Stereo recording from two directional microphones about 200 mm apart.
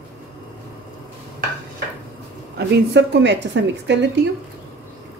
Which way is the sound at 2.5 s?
60° right (ahead or behind).